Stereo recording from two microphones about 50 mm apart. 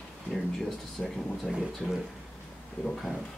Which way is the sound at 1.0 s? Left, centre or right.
Centre.